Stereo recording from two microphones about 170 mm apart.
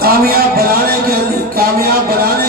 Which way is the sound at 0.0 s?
60° right (ahead or behind).